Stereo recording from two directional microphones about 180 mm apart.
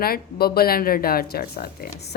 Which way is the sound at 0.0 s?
60° left (ahead or behind).